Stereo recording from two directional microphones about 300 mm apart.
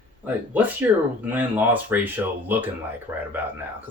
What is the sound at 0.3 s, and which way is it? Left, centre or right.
Speech, centre.